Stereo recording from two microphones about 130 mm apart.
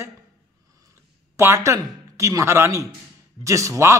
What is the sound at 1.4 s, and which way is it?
A man's voice, 20° right (ahead or behind).